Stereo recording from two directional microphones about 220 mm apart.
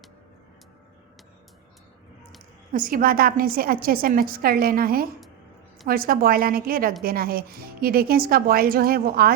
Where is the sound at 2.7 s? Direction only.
40° right (ahead or behind).